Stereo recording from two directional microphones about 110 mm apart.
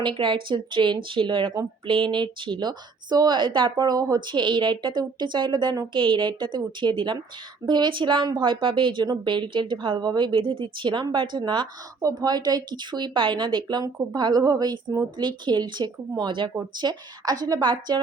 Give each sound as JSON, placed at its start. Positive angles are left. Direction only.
{"t": 0.0, "sound": "speech", "side_deg": -45}
{"t": 5.9, "sound": "speech", "side_deg": -50}